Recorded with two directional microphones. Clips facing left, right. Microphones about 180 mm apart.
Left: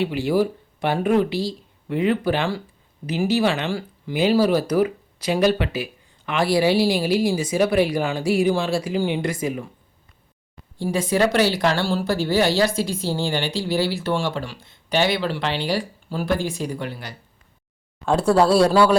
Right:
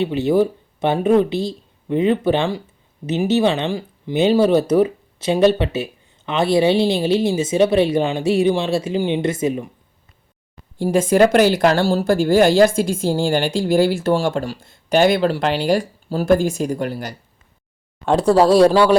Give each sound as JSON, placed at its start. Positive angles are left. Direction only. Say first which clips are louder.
{"t": 0.0, "sound": "speech", "louder": "right 4 dB", "side_deg": -20}
{"t": 10.8, "sound": "a woman's voice", "louder": "right 6 dB", "side_deg": -50}
{"t": 18.1, "sound": "speech", "louder": "right 3 dB", "side_deg": -25}